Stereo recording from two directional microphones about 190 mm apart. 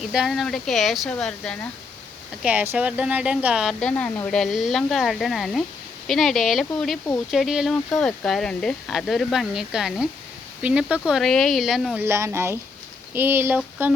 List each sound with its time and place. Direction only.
0.1 s speech: centre (ahead or behind)
12.0 s speech: 15° right (ahead or behind)